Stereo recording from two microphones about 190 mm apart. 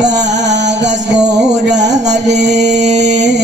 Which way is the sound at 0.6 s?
65° right (ahead or behind).